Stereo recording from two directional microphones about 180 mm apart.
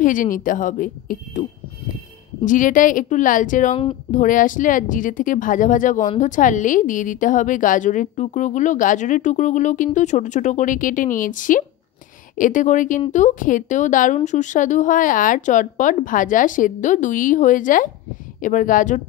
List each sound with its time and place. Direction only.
0.0 s speech: 45° left (ahead or behind)
2.4 s speech: 45° left (ahead or behind)